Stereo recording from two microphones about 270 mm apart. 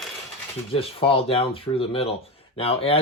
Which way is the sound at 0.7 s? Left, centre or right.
Centre.